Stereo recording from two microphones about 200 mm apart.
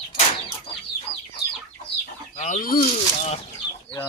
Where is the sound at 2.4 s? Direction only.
35° left (ahead or behind).